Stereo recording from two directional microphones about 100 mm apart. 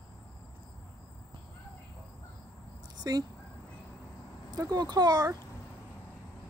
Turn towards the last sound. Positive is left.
turn(degrees=-40)  # may be behind; listen again after turning